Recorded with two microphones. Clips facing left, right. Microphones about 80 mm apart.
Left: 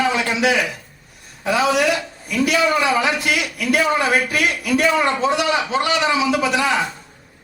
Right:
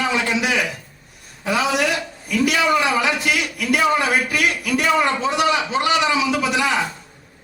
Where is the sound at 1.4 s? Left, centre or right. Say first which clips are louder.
Left 2 dB; left.